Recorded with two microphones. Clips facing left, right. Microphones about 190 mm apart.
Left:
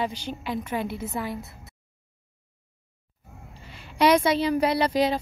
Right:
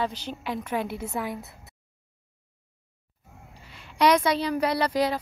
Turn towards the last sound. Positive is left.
turn(degrees=25)  # may be behind; listen again after turning